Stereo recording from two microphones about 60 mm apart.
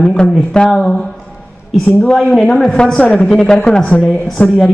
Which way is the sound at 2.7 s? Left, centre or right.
Centre.